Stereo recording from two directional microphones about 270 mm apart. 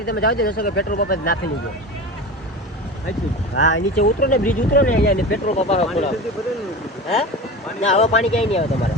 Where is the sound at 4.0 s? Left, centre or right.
Left.